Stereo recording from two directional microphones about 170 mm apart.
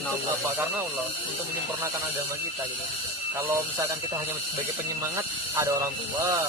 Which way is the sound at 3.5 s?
15° right (ahead or behind).